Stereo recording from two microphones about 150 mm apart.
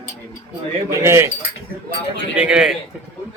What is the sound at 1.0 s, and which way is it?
Speech, 20° right (ahead or behind).